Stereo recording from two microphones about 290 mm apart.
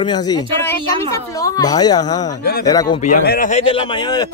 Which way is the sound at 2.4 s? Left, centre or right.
Left.